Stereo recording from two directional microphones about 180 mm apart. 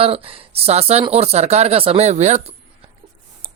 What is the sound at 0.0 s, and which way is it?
Speech, 30° right (ahead or behind).